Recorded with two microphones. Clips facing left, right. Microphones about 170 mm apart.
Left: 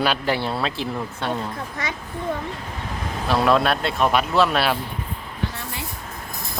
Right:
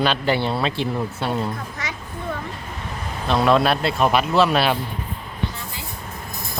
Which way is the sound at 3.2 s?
Centre (ahead or behind).